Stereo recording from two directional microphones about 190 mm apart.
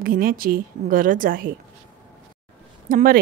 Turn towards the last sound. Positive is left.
turn(degrees=-45)  # may be behind; listen again after turning